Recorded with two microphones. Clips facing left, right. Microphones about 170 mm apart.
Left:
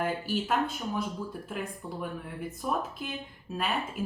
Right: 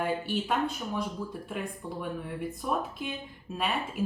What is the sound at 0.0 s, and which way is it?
A woman's voice, centre (ahead or behind).